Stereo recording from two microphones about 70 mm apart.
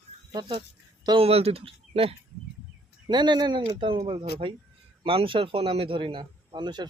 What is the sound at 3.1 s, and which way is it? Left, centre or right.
Speech, right.